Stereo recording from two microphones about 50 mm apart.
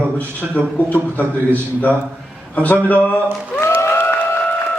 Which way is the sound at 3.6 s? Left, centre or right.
Left.